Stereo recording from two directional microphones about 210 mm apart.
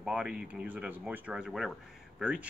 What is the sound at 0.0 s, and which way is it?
Speech, 5° right (ahead or behind).